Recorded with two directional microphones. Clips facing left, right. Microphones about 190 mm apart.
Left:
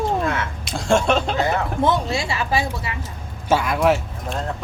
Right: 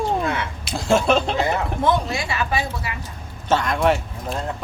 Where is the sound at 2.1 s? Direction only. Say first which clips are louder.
Left 1 dB; 25° left (ahead or behind).